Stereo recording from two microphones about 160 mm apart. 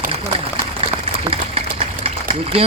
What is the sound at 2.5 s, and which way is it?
Speech, 35° right (ahead or behind).